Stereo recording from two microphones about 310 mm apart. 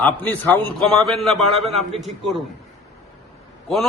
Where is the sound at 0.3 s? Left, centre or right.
Centre.